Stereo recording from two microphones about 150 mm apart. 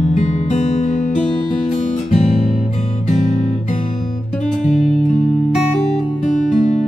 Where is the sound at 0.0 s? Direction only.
55° left (ahead or behind).